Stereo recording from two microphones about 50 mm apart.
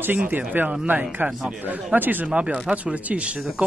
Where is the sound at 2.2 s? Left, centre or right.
Right.